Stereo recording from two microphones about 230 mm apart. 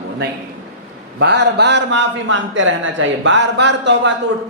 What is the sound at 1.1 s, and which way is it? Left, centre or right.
A man's voice, right.